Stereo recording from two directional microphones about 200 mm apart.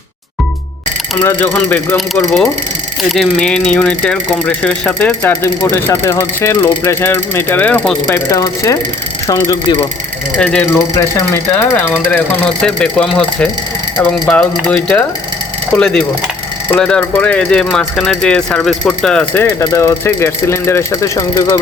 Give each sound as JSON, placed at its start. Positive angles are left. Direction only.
{"t": 1.1, "sound": "speech", "side_deg": 15}
{"t": 10.3, "sound": "speech", "side_deg": 5}